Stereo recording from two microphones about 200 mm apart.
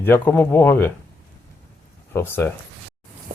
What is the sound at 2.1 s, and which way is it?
Speech, 10° left (ahead or behind).